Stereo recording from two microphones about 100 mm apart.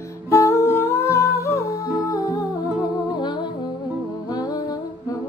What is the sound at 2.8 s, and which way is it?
Music, 50° left (ahead or behind).